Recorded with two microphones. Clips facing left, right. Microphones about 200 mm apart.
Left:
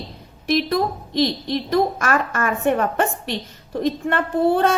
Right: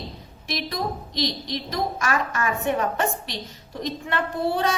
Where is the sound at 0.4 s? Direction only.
55° left (ahead or behind).